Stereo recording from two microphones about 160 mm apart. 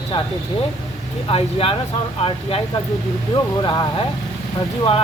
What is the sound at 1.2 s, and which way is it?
Speech, 35° left (ahead or behind).